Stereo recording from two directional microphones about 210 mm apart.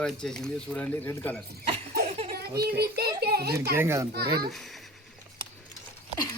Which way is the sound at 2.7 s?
50° right (ahead or behind).